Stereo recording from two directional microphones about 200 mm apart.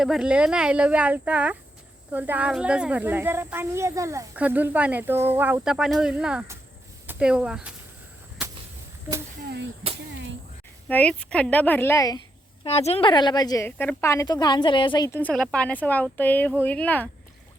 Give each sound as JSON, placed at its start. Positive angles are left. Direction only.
{"t": 0.0, "sound": "speech", "side_deg": -5}
{"t": 9.8, "sound": "a sound", "side_deg": -30}
{"t": 10.8, "sound": "a woman's voice", "side_deg": 5}
{"t": 12.6, "sound": "a woman's voice", "side_deg": 30}